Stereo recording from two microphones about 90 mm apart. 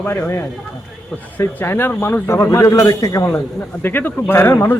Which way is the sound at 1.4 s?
25° left (ahead or behind).